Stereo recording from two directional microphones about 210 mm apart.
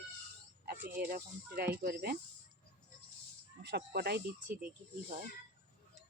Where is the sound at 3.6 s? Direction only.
50° right (ahead or behind).